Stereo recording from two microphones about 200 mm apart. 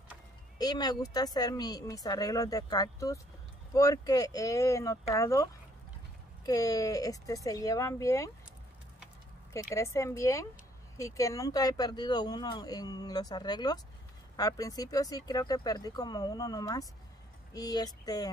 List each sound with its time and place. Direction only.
0.6 s speech: 20° left (ahead or behind)
9.5 s speech: 15° left (ahead or behind)